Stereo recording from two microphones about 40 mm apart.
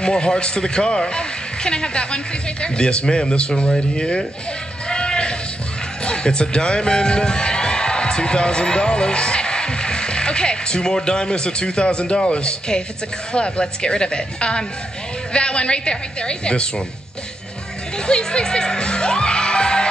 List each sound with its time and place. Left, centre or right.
0.0 s a man's voice: left
4.8 s a sound: centre
6.0 s a man's voice: left
17.9 s music: left